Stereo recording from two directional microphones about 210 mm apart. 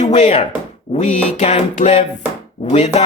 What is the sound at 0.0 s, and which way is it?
Speech, 35° left (ahead or behind).